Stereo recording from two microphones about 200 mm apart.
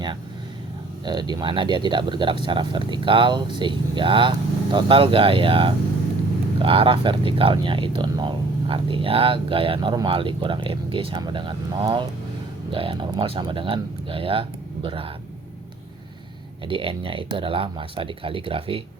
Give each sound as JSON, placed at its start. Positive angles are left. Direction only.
{"t": 1.0, "sound": "speech", "side_deg": -20}
{"t": 16.6, "sound": "speech", "side_deg": -25}